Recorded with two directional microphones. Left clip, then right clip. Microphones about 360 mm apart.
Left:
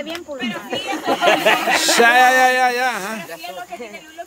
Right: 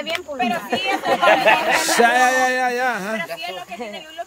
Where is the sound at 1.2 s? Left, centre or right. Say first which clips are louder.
Even; left.